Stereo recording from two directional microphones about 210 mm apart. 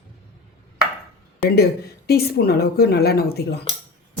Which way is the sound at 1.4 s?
50° left (ahead or behind).